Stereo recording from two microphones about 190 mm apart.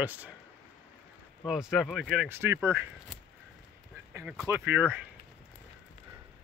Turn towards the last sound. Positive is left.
turn(degrees=-10)  # may be behind; listen again after turning